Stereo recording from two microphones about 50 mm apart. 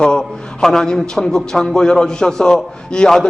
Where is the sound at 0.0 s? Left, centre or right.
Centre.